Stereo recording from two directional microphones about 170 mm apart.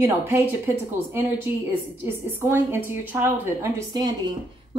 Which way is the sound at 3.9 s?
25° right (ahead or behind).